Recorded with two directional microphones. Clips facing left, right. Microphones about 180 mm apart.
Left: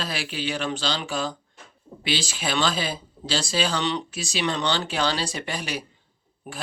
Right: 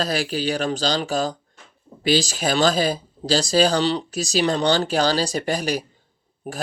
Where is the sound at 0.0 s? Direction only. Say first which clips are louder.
Right 7 dB; 40° right (ahead or behind).